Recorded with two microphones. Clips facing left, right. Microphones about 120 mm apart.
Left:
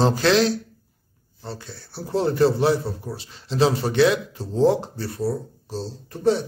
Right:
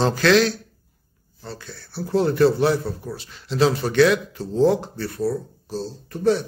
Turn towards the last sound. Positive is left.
turn(degrees=30)  # may be behind; listen again after turning